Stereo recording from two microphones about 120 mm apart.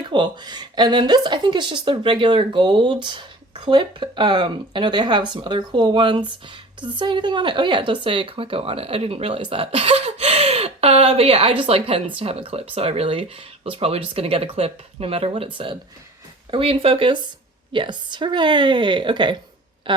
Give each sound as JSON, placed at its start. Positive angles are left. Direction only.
{"t": 0.0, "sound": "a woman's voice", "side_deg": -40}